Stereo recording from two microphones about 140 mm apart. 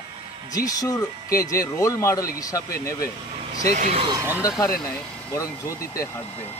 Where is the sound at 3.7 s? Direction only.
55° right (ahead or behind).